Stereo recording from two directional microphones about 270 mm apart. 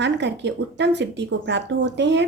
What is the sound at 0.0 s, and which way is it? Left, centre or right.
A woman's voice, right.